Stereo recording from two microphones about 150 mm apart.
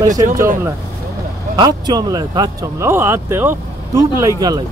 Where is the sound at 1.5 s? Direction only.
30° right (ahead or behind).